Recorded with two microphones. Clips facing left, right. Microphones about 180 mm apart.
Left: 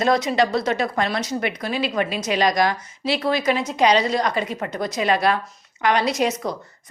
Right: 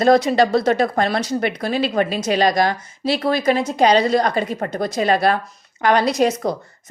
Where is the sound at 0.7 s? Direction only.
35° right (ahead or behind).